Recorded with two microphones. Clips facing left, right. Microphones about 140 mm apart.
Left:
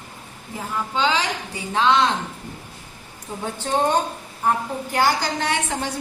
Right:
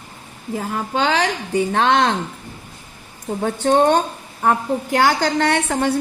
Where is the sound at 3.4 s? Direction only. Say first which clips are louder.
Right 7 dB; 65° right (ahead or behind).